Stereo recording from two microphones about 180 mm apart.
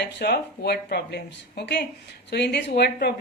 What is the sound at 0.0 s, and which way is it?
A woman's voice, 65° left (ahead or behind).